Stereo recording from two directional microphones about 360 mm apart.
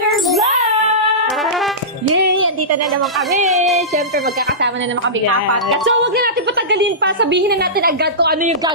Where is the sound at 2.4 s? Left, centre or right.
Right.